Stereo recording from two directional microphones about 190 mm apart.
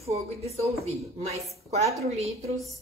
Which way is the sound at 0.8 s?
35° right (ahead or behind).